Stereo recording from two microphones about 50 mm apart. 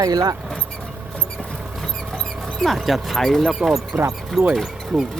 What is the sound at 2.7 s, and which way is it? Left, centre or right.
Speech, centre.